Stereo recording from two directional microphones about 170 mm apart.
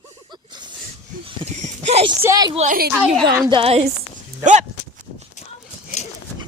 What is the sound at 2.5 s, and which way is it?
Speech, 45° right (ahead or behind).